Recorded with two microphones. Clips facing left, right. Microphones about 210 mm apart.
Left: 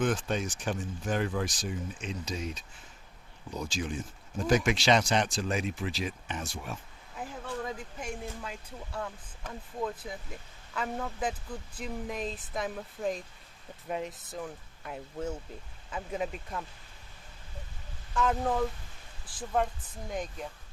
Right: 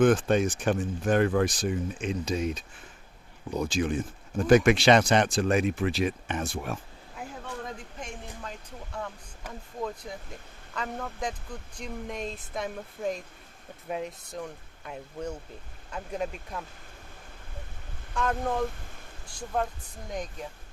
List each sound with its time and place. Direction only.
0.0 s speech: 55° right (ahead or behind)
7.9 s speech: 5° left (ahead or behind)
18.1 s speech: 5° left (ahead or behind)